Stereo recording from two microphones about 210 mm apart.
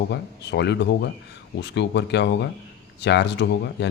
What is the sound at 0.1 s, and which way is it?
Speech, 55° left (ahead or behind).